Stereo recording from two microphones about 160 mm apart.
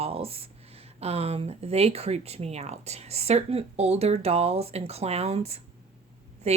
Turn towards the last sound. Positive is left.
turn(degrees=-40)  # may be behind; listen again after turning